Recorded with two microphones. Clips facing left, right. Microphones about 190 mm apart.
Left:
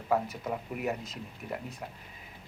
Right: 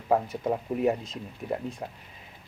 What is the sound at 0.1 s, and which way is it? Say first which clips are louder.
Speech: right 5 dB; 30° right (ahead or behind).